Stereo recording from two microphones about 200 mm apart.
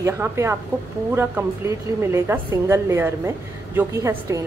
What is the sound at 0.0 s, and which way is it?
A woman's voice, 15° right (ahead or behind).